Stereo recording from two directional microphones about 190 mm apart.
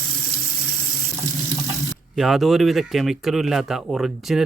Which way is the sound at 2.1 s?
Centre (ahead or behind).